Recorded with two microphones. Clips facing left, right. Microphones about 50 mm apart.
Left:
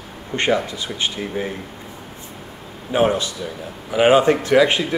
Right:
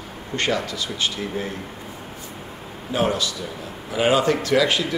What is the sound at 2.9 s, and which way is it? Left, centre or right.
A man's voice, left.